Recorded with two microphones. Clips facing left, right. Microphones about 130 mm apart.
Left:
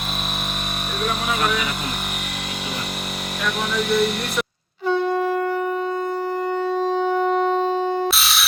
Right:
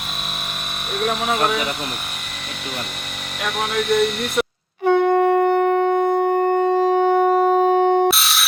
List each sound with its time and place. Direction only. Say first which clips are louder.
1.3 s speech: right 2 dB; 45° right (ahead or behind)
4.9 s shofar: right 5 dB; 55° right (ahead or behind)
8.0 s a sound: right 4 dB; centre (ahead or behind)